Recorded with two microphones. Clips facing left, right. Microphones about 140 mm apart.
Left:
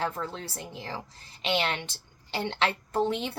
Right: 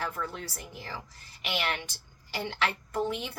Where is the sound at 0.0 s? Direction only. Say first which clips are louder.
Left 3 dB; 25° left (ahead or behind).